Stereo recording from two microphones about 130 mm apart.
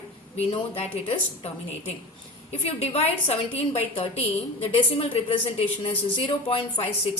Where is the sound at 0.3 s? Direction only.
45° left (ahead or behind).